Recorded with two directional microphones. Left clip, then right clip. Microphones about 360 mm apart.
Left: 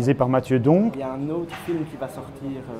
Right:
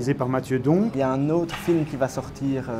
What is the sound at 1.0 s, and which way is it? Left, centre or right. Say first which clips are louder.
Speech: right 5 dB; right.